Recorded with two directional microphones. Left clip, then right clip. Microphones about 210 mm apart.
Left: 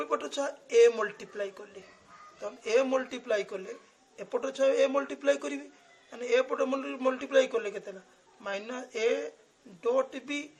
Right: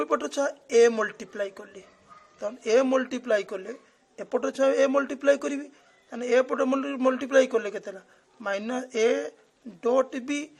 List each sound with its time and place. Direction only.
0.0 s a man's voice: 35° right (ahead or behind)